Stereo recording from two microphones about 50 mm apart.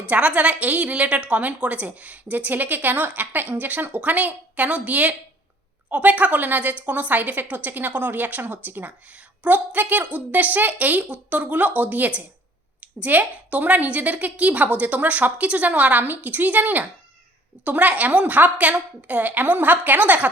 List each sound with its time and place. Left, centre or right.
0.1 s a woman's voice: right